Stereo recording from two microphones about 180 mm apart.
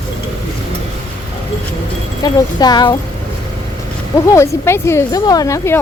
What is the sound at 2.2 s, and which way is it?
Speech, 20° left (ahead or behind).